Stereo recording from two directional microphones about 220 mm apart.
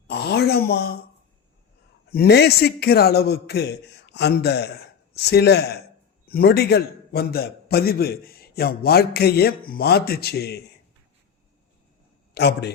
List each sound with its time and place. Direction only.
0.1 s speech: 50° left (ahead or behind)
2.0 s a man's voice: 45° left (ahead or behind)
12.3 s a man's voice: 50° left (ahead or behind)